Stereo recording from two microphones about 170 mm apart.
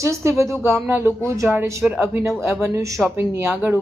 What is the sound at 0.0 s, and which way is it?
Speech, 15° right (ahead or behind).